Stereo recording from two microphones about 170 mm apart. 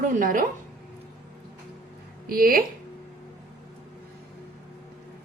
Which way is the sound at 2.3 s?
60° right (ahead or behind).